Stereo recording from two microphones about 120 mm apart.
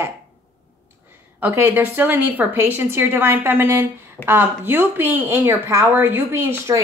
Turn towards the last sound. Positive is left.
turn(degrees=-20)  # may be behind; listen again after turning